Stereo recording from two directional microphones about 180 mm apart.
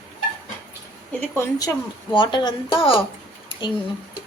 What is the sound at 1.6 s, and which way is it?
A woman's voice, 25° left (ahead or behind).